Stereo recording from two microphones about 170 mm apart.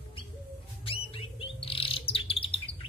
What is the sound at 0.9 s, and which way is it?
Bird, 35° left (ahead or behind).